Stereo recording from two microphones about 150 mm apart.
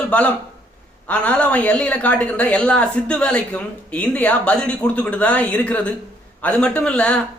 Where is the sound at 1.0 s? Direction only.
10° left (ahead or behind).